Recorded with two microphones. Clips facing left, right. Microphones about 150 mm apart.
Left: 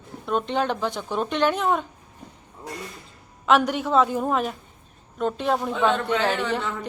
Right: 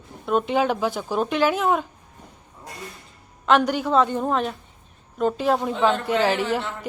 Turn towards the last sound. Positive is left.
turn(degrees=-5)  # may be behind; listen again after turning